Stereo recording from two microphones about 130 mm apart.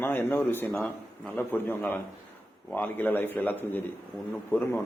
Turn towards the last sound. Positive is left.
turn(degrees=15)  # may be behind; listen again after turning